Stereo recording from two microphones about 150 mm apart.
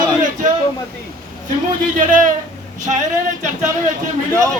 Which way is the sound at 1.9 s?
60° right (ahead or behind).